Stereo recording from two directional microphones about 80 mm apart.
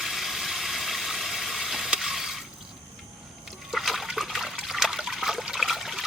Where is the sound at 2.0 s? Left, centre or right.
Centre.